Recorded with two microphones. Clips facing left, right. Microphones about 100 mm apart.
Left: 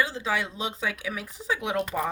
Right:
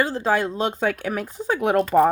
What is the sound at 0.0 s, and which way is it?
Speech, 45° right (ahead or behind).